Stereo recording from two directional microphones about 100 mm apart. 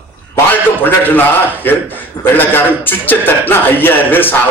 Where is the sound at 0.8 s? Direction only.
20° left (ahead or behind).